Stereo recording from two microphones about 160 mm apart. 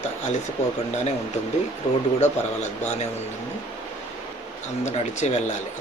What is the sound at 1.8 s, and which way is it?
Speech, 30° left (ahead or behind).